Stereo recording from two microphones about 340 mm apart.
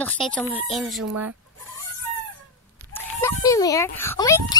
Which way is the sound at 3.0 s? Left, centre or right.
Centre.